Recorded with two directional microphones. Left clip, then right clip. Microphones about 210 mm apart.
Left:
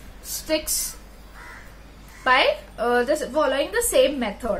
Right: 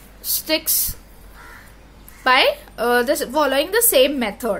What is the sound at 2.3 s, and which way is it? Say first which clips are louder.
A woman's voice: right 3 dB; 50° right (ahead or behind).